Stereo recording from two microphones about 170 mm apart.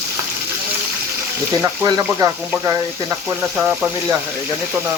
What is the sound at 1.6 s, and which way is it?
Speech, 20° right (ahead or behind).